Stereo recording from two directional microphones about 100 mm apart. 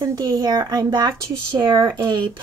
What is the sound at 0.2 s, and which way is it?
Speech, 40° right (ahead or behind).